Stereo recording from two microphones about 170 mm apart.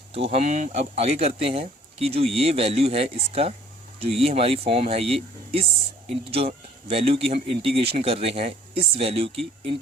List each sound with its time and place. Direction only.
0.1 s speech: 35° right (ahead or behind)